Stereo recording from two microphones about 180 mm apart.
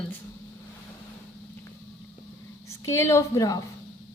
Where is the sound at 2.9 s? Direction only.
15° left (ahead or behind).